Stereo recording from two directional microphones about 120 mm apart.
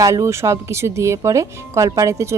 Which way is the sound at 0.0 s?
25° right (ahead or behind).